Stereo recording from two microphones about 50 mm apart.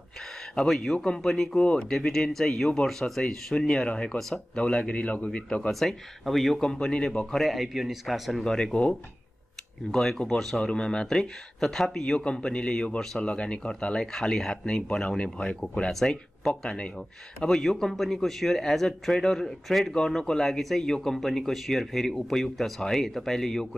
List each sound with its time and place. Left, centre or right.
0.6 s speech: centre
1.2 s speech: centre
1.6 s a man's voice: left
1.9 s a man's voice: centre
5.7 s speech: centre
7.3 s speech: centre
9.8 s speech: centre
10.6 s a man's voice: left
11.1 s a man's voice: centre
15.9 s speech: centre